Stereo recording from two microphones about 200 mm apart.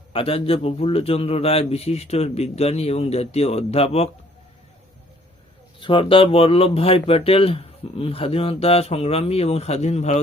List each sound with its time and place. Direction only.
0.1 s a man's voice: 25° left (ahead or behind)
5.8 s speech: 25° left (ahead or behind)